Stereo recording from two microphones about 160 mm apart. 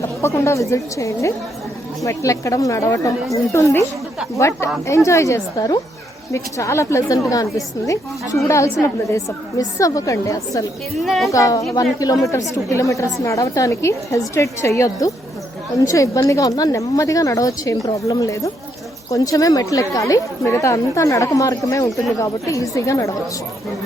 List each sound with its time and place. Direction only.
0.0 s a woman's voice: 15° left (ahead or behind)
11.0 s a woman's voice: centre (ahead or behind)
11.3 s speech: 20° left (ahead or behind)